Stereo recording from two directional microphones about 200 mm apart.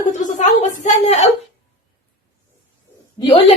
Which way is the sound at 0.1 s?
40° left (ahead or behind).